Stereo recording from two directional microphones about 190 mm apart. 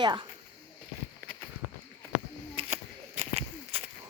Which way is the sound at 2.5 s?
30° right (ahead or behind).